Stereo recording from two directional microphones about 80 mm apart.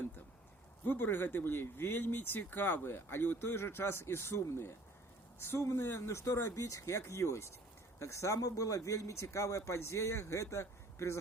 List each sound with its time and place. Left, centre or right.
0.9 s speech: left